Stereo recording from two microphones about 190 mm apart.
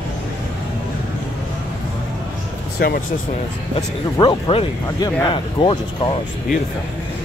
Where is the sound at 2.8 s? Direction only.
50° left (ahead or behind).